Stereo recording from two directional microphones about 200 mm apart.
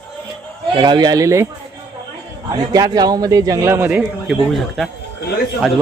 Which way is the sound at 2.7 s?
20° right (ahead or behind).